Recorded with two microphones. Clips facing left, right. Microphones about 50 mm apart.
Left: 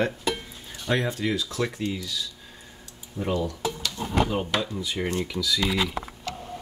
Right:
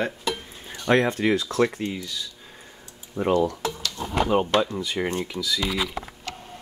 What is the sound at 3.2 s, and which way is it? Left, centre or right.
Speech, right.